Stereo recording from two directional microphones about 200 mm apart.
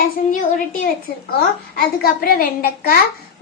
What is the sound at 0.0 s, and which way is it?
A child's voice, 45° left (ahead or behind).